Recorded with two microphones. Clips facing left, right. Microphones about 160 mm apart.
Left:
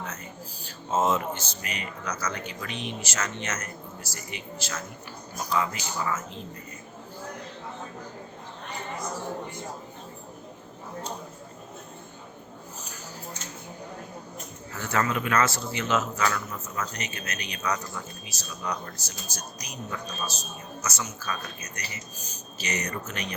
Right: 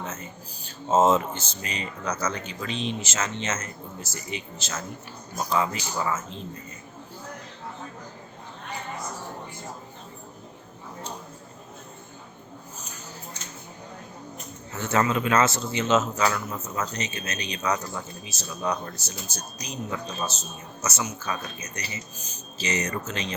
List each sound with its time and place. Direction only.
0.0 s a sound: 25° right (ahead or behind)
0.9 s speech: 25° right (ahead or behind)
14.7 s speech: 25° right (ahead or behind)
23.0 s speech: 90° right